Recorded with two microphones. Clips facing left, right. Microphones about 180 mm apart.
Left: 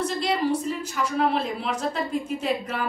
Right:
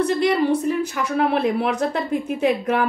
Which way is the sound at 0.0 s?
60° right (ahead or behind).